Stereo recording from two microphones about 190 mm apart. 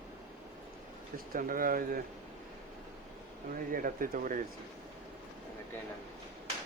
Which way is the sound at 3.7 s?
45° right (ahead or behind).